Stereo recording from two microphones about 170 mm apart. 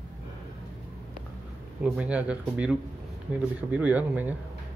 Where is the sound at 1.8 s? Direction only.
5° right (ahead or behind).